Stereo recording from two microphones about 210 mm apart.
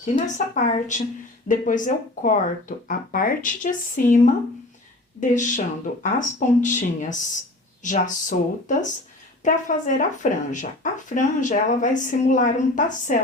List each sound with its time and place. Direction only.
0.0 s speech: 35° left (ahead or behind)
5.3 s speech: 35° left (ahead or behind)